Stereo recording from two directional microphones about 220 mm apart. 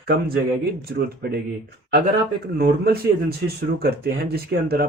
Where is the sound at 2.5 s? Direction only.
45° right (ahead or behind).